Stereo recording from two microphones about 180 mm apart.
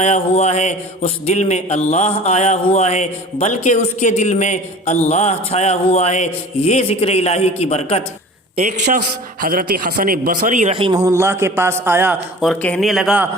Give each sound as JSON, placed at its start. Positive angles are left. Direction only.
{"t": 0.0, "sound": "speech", "side_deg": 40}
{"t": 9.0, "sound": "speech", "side_deg": -55}
{"t": 11.0, "sound": "a man's voice", "side_deg": -15}
{"t": 12.4, "sound": "a man's voice", "side_deg": 5}